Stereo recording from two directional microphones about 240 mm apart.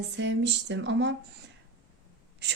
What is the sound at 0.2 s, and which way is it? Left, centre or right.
Speech, right.